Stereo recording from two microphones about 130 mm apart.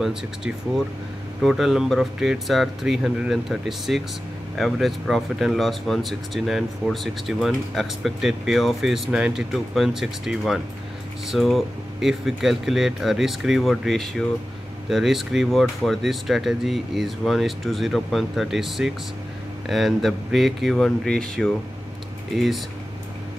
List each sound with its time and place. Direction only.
0.0 s speech: 5° right (ahead or behind)